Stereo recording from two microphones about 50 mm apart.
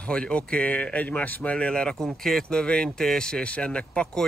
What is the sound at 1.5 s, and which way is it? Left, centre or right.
Speech, left.